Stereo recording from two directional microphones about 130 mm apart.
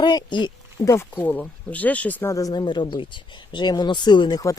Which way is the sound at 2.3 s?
30° left (ahead or behind).